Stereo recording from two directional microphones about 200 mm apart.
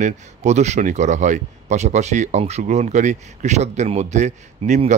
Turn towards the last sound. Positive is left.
turn(degrees=-35)  # may be behind; listen again after turning